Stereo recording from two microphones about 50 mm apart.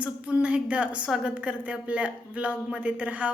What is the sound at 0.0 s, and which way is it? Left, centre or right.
A woman's voice, right.